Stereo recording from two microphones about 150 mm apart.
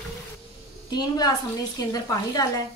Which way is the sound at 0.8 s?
25° left (ahead or behind).